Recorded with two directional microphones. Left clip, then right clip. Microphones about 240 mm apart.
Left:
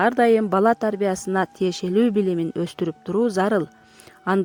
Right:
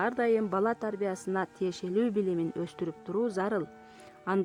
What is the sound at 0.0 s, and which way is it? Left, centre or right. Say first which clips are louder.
Speech: left 10 dB; left.